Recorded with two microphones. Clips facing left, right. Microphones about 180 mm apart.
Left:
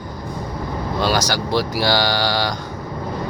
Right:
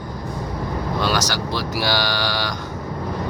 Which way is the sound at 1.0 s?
45° left (ahead or behind).